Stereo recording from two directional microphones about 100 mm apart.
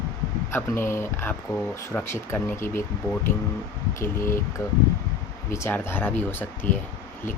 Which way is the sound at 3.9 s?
25° left (ahead or behind).